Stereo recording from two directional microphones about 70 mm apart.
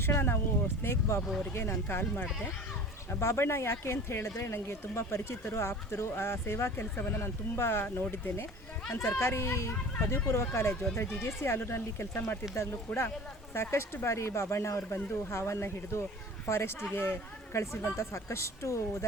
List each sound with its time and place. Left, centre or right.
0.0 s speech: left
9.0 s speech: left